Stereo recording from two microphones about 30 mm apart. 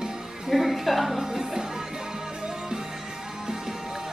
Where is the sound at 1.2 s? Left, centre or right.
Centre.